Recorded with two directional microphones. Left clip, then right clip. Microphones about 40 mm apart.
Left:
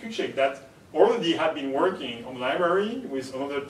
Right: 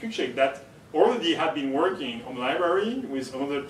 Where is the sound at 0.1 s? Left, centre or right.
Centre.